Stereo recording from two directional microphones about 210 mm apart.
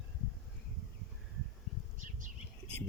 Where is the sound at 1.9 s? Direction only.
40° right (ahead or behind).